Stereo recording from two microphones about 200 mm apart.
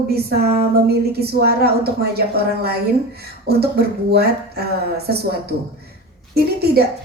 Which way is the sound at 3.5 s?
55° right (ahead or behind).